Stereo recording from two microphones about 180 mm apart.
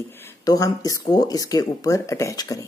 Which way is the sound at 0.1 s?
15° left (ahead or behind).